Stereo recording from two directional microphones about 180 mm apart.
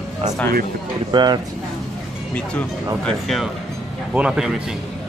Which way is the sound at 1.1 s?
25° right (ahead or behind).